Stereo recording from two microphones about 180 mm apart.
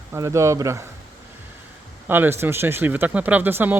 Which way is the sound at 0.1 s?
15° right (ahead or behind).